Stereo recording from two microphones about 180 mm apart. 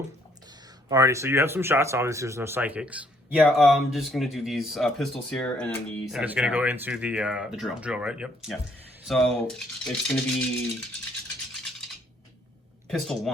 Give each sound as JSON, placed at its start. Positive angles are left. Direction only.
{"t": 0.9, "sound": "speech", "side_deg": -15}
{"t": 12.9, "sound": "speech", "side_deg": 0}